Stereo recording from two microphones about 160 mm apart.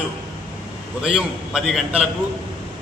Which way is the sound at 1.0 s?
5° right (ahead or behind).